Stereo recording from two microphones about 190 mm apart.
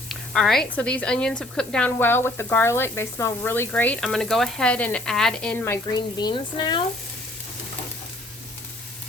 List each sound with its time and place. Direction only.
0.1 s speech: centre (ahead or behind)
6.0 s speech: 25° left (ahead or behind)